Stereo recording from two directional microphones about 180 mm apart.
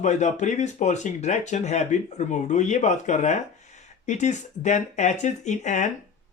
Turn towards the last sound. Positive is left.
turn(degrees=40)  # may be behind; listen again after turning